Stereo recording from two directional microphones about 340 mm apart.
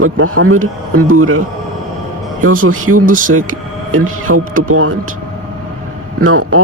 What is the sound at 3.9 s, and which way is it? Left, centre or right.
A man's voice, right.